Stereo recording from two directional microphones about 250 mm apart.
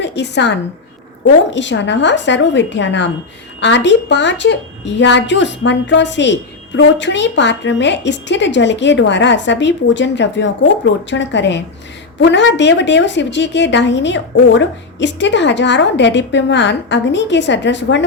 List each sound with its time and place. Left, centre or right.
0.0 s a woman's voice: left
1.5 s a woman's voice: left